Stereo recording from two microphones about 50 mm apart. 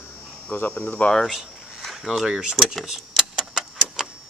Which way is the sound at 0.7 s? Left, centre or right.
Left.